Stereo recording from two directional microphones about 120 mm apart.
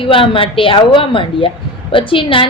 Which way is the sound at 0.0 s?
45° left (ahead or behind).